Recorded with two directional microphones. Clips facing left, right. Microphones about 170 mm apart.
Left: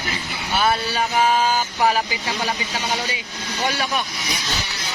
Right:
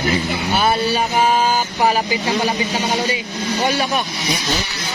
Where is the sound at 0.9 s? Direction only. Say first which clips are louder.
Right 3 dB; 15° right (ahead or behind).